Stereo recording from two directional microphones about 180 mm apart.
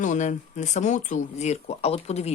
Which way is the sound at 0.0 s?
45° left (ahead or behind).